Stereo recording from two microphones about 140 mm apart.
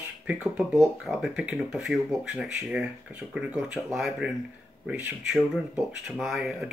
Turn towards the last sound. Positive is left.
turn(degrees=0)  # may be behind; listen again after turning